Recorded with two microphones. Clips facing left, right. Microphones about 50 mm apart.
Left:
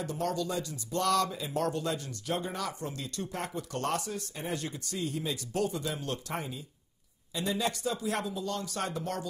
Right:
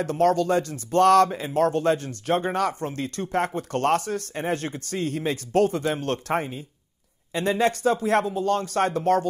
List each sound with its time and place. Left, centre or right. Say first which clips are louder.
0.0 s speech: right 11 dB; right